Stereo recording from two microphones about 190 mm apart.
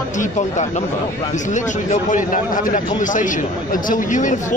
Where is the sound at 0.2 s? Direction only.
40° left (ahead or behind).